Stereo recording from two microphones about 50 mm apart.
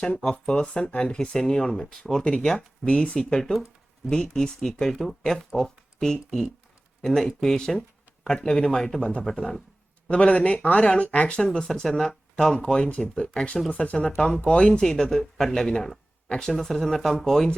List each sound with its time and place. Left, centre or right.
0.2 s speech: centre
2.2 s speech: centre
10.1 s speech: left; by 17.5 s centre